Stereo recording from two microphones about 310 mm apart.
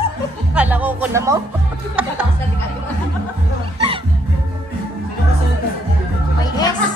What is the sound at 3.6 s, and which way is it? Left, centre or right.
Music, centre.